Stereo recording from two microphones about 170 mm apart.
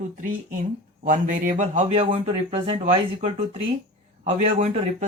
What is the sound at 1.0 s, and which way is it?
Speech, 50° right (ahead or behind).